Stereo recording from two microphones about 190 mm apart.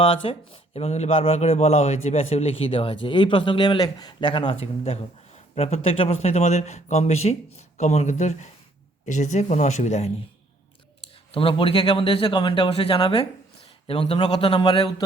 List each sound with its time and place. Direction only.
0.0 s speech: 30° left (ahead or behind)
11.3 s speech: 25° left (ahead or behind)